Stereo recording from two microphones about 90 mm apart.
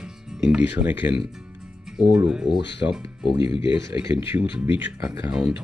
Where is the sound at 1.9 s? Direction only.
5° right (ahead or behind).